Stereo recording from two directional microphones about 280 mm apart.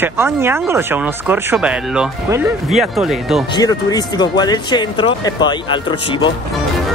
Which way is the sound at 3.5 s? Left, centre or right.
Centre.